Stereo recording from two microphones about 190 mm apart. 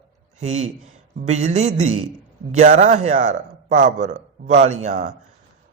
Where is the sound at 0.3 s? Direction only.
35° right (ahead or behind).